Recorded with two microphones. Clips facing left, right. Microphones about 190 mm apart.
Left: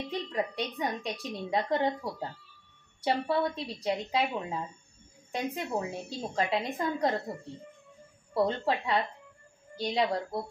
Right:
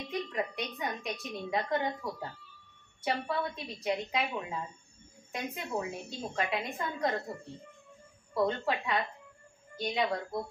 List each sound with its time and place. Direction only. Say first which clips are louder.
0.1 s a woman's voice: even; 35° left (ahead or behind)
8.3 s a woman's voice: left 2 dB; 35° left (ahead or behind)